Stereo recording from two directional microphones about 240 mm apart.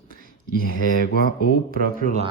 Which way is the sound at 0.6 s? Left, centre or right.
Left.